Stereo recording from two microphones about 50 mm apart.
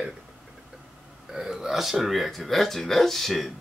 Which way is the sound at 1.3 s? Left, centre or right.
Centre.